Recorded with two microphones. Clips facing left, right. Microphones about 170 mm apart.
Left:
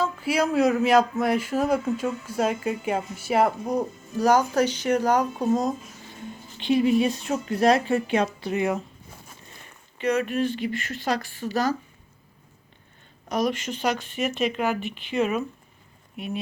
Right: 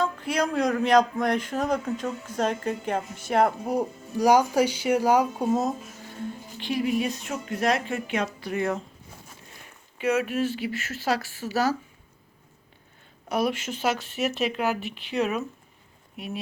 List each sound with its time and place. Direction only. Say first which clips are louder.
0.0 s speech: left 2 dB; 5° left (ahead or behind)
3.7 s speech: even; 10° right (ahead or behind)
6.6 s speech: left 6 dB; 25° left (ahead or behind)
9.6 s speech: even; 5° right (ahead or behind)
13.2 s speech: left 1 dB; 10° right (ahead or behind)